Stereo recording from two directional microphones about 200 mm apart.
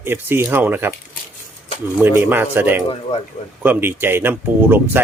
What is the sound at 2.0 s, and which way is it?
Speech, 10° right (ahead or behind).